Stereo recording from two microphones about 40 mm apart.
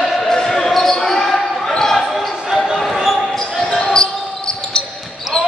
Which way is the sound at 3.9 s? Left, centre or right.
Centre.